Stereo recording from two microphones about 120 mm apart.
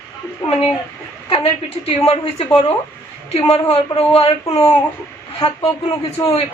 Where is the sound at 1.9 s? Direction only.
55° left (ahead or behind).